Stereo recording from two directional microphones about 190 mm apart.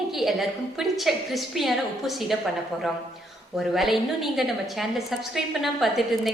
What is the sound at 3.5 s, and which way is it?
A woman's voice, centre (ahead or behind).